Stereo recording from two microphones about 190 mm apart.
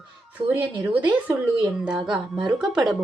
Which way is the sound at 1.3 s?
5° right (ahead or behind).